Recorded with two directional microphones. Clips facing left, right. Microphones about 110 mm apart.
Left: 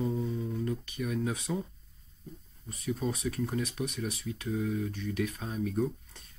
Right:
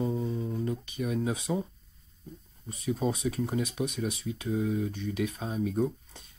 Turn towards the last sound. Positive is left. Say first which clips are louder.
# right 2 dB
turn(degrees=-25)  # may be behind; listen again after turning